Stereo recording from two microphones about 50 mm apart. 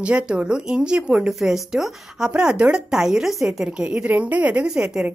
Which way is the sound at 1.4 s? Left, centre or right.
Centre.